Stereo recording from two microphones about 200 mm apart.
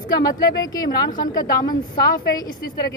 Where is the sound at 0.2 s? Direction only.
20° left (ahead or behind).